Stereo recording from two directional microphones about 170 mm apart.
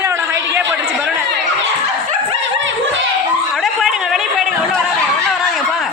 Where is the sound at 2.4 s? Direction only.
90° right.